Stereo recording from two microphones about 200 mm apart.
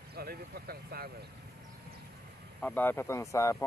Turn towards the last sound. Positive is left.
turn(degrees=15)  # may be behind; listen again after turning